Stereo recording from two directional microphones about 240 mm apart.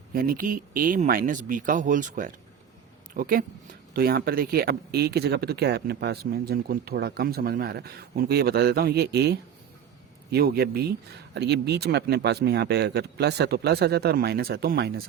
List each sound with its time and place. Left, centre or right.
0.1 s speech: right